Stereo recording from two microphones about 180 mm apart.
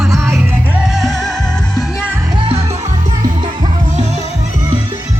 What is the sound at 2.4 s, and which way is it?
Music, 30° right (ahead or behind).